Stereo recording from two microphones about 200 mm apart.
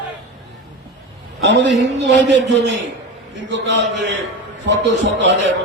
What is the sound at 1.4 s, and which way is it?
A man's voice, 65° right (ahead or behind).